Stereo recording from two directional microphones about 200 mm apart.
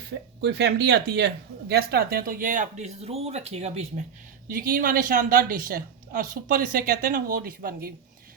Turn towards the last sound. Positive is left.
turn(degrees=-45)  # may be behind; listen again after turning